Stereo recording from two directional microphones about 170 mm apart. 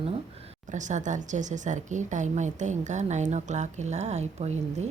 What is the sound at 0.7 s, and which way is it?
Speech, 45° right (ahead or behind).